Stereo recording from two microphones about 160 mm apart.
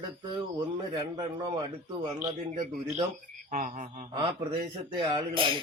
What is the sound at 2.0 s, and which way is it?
Speech, 50° right (ahead or behind).